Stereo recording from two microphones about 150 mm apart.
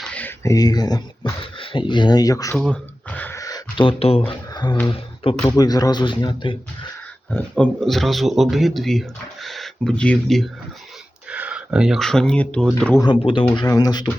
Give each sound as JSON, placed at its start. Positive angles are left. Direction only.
{"t": 0.0, "sound": "a sound", "side_deg": 10}
{"t": 0.5, "sound": "speech", "side_deg": 25}
{"t": 2.6, "sound": "a sound", "side_deg": 10}
{"t": 4.3, "sound": "speech", "side_deg": 30}
{"t": 5.4, "sound": "speech", "side_deg": 25}
{"t": 7.3, "sound": "speech", "side_deg": 5}
{"t": 11.3, "sound": "speech", "side_deg": -10}
{"t": 13.0, "sound": "speech", "side_deg": 35}
{"t": 13.7, "sound": "speech", "side_deg": 25}